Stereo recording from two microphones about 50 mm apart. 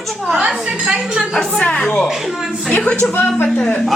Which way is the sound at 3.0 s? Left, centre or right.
Left.